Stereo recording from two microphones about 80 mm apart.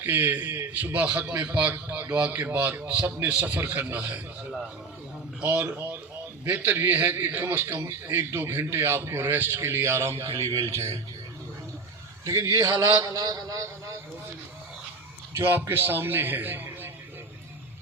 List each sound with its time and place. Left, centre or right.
0.0 s a man's voice: right
5.4 s a man's voice: centre; by 10.8 s right
12.2 s a man's voice: right
15.4 s a man's voice: right